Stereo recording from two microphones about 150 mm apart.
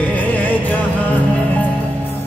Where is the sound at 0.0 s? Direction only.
10° left (ahead or behind).